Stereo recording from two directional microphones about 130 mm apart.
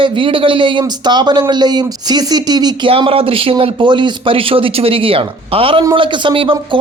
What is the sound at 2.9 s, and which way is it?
Speech, 45° right (ahead or behind).